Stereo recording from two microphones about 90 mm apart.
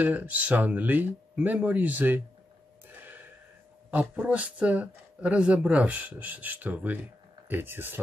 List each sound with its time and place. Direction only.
0.0 s speech: 20° right (ahead or behind)
3.9 s speech: 15° right (ahead or behind)